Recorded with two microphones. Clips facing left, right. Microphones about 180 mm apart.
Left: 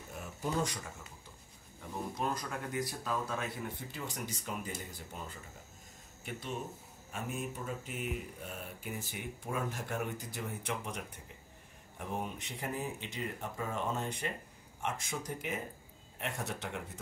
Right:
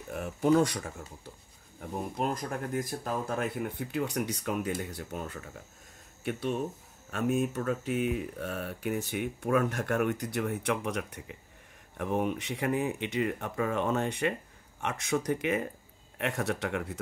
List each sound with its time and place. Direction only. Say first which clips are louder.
0.1 s speech: right 12 dB; 65° right (ahead or behind)
1.8 s speech: right 5 dB; 50° right (ahead or behind)
7.1 s speech: right 11 dB; 85° right
12.0 s speech: right 9 dB; 65° right (ahead or behind)